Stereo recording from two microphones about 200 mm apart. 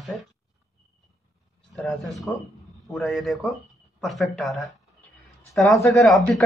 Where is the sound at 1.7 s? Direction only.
Centre (ahead or behind).